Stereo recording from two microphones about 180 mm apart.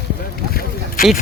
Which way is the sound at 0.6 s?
50° left (ahead or behind).